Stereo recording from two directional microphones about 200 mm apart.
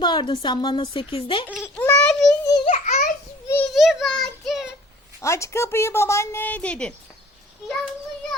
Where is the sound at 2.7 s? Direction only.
40° left (ahead or behind).